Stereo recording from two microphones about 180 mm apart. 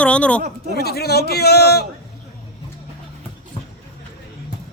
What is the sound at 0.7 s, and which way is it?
A man's voice, 60° left (ahead or behind).